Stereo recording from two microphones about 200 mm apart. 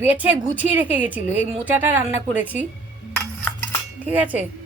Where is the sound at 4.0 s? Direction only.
10° right (ahead or behind).